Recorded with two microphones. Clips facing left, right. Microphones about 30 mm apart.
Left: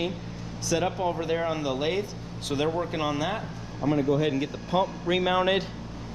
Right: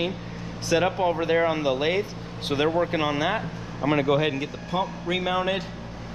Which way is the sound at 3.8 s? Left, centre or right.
Right.